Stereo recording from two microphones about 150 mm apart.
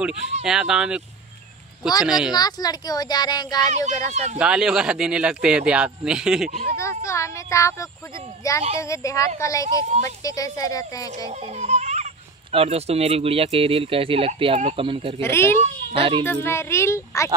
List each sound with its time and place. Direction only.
0.0 s speech: 5° right (ahead or behind)
2.0 s speech: 5° right (ahead or behind)
2.3 s speech: 25° left (ahead or behind)
4.1 s speech: 50° right (ahead or behind)
4.4 s speech: 5° right (ahead or behind)
6.8 s speech: 20° left (ahead or behind)
11.5 s baby laughter: 50° right (ahead or behind)
12.5 s speech: 45° right (ahead or behind)
15.2 s a child's voice: 15° left (ahead or behind)
15.6 s a child's voice: 35° right (ahead or behind)
16.3 s a child's voice: 15° left (ahead or behind)